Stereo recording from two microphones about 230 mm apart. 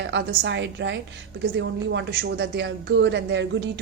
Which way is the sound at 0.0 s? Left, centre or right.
Right.